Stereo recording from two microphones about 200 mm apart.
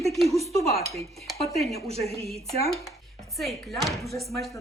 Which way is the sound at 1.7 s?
30° right (ahead or behind).